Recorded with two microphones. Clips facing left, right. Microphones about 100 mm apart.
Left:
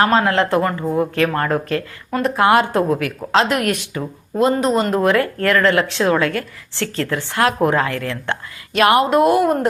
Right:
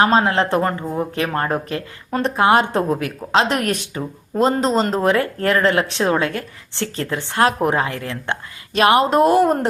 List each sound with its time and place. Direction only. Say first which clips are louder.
0.0 s speech: even; 20° right (ahead or behind)
0.6 s speech: left 1 dB; 35° right (ahead or behind)
1.1 s speech: left 3 dB; 20° right (ahead or behind)